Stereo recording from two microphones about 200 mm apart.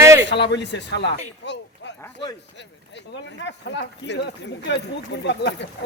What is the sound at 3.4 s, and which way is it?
Speech, 60° left (ahead or behind).